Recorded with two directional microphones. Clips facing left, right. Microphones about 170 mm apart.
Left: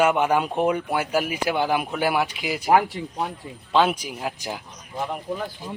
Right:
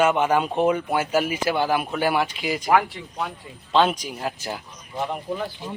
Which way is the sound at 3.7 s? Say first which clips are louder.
Even; 10° left (ahead or behind).